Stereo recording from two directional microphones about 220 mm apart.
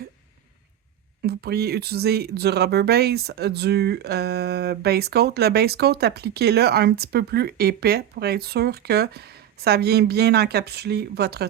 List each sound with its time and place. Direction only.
1.2 s speech: 45° right (ahead or behind)